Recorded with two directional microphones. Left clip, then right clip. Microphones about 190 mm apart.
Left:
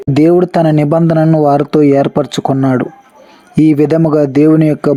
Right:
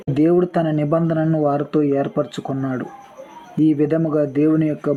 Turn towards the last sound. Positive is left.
turn(degrees=35)  # may be behind; listen again after turning